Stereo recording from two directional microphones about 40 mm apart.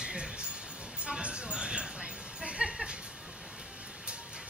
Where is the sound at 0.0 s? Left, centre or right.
Right.